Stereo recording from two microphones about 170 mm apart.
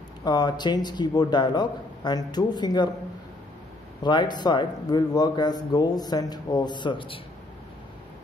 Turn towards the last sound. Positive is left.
turn(degrees=30)  # may be behind; listen again after turning